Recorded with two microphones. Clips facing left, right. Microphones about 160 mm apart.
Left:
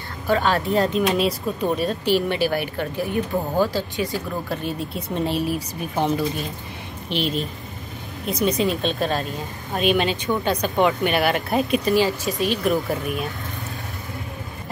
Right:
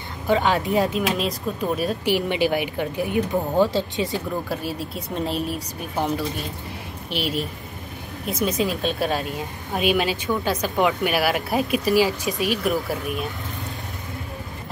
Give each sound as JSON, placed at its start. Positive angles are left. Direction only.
{"t": 0.3, "sound": "speech", "side_deg": -15}
{"t": 2.1, "sound": "speech", "side_deg": -15}
{"t": 4.5, "sound": "speech", "side_deg": -5}